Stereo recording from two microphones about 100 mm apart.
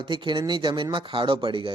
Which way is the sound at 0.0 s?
50° right (ahead or behind).